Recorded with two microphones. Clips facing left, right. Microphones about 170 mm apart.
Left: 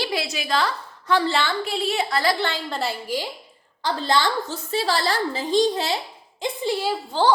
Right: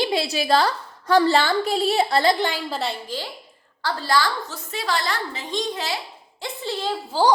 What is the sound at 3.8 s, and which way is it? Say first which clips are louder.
A woman's voice: even; 20° left (ahead or behind).